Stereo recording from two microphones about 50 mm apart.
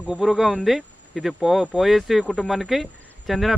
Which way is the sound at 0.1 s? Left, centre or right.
Centre.